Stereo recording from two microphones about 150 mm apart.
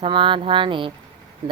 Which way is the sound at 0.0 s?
35° right (ahead or behind).